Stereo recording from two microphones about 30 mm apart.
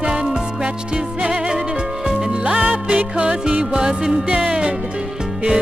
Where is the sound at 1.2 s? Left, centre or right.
Right.